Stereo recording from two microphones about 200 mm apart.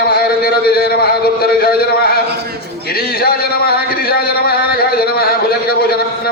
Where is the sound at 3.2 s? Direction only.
50° left (ahead or behind).